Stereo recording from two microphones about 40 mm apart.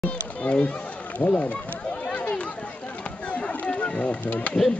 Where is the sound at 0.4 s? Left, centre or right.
Left.